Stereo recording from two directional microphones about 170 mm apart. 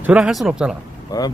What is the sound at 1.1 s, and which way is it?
Speech, 25° left (ahead or behind).